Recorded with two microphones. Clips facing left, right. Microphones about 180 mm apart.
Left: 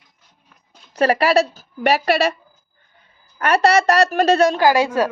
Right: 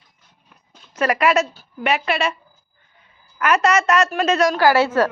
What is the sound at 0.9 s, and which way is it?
A woman's voice, 30° left (ahead or behind).